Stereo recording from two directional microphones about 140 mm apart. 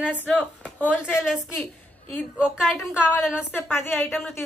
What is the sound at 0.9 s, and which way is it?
Speech, 5° right (ahead or behind).